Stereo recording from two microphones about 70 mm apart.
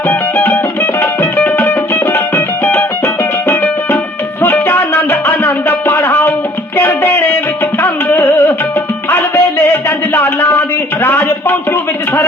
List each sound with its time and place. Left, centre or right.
0.1 s music: left
4.4 s music: left
10.2 s a sound: left